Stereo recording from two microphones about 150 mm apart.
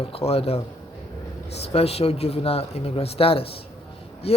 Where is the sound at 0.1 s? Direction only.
40° left (ahead or behind).